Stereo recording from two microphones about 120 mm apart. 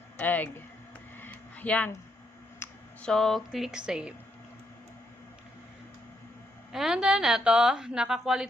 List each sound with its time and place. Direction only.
0.2 s speech: 15° left (ahead or behind)
1.1 s a sound: 15° left (ahead or behind)
2.6 s clicking: 20° left (ahead or behind)
3.0 s a woman's voice: 5° left (ahead or behind)
6.7 s a woman's voice: 5° right (ahead or behind)